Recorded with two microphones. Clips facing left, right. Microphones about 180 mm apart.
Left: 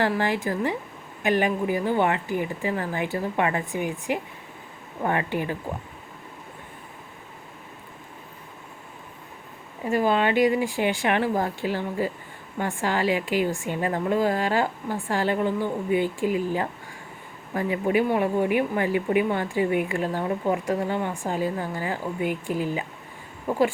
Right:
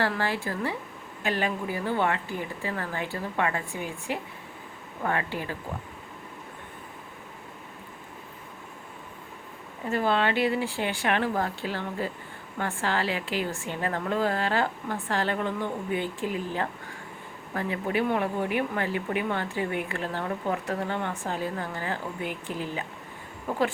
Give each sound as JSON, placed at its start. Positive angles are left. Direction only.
{"t": 0.0, "sound": "speech", "side_deg": 15}
{"t": 9.8, "sound": "speech", "side_deg": 15}